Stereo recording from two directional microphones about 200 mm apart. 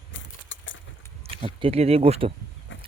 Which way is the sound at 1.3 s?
25° right (ahead or behind).